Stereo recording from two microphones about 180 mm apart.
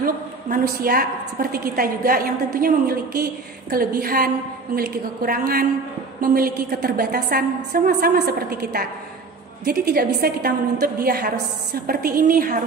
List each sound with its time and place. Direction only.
0.0 s a woman's voice: 55° right (ahead or behind)